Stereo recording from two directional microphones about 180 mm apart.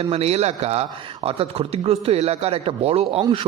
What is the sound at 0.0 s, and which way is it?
Speech, 35° right (ahead or behind).